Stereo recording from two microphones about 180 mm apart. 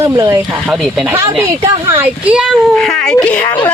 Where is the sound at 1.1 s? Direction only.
15° right (ahead or behind).